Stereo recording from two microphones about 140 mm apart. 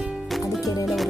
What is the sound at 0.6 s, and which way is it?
Music, 25° left (ahead or behind).